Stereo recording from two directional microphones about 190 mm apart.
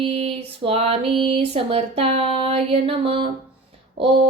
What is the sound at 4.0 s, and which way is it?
Music, 30° right (ahead or behind).